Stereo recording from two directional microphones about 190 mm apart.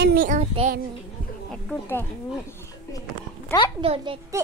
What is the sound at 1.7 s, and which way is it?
Speech, 10° left (ahead or behind).